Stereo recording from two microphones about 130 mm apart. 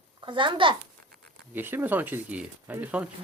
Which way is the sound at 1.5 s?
15° right (ahead or behind).